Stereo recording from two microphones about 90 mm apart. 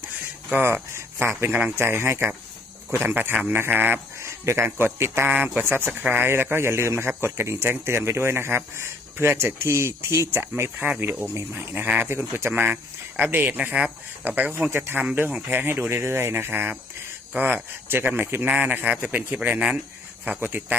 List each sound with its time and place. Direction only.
0.5 s speech: 30° right (ahead or behind)
5.3 s speech: 15° right (ahead or behind)
17.8 s speech: 25° right (ahead or behind)